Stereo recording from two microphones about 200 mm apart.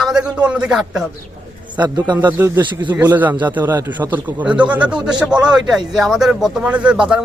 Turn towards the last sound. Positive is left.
turn(degrees=-5)  # may be behind; listen again after turning